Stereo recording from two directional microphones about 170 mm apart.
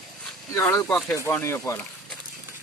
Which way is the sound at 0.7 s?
15° left (ahead or behind).